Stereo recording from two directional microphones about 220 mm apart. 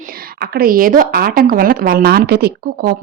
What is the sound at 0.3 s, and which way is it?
A woman's voice, 45° right (ahead or behind).